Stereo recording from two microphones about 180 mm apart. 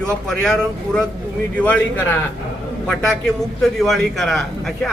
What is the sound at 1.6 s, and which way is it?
Speech, 10° left (ahead or behind).